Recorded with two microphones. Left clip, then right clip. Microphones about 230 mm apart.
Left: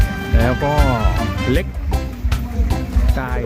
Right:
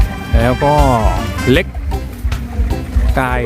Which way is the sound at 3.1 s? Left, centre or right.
Right.